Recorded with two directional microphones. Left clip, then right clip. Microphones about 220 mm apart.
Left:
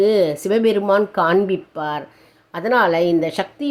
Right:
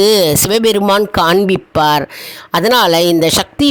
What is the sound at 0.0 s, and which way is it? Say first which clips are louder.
Speech: right 6 dB; 50° right (ahead or behind).